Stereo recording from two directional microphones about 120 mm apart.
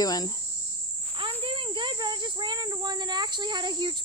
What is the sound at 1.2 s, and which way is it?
Speech, 45° right (ahead or behind).